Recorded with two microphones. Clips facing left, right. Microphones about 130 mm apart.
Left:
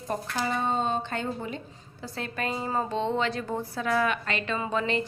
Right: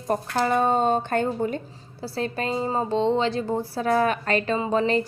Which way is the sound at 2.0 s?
35° right (ahead or behind).